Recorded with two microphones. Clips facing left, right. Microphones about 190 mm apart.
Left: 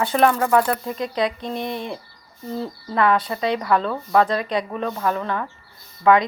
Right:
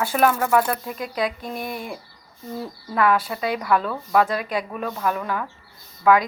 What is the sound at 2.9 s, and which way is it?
Speech, 5° right (ahead or behind).